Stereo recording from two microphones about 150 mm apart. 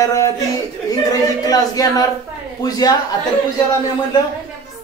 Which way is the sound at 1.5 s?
25° left (ahead or behind).